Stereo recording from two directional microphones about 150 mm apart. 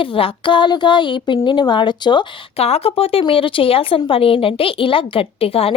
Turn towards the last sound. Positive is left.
turn(degrees=40)  # may be behind; listen again after turning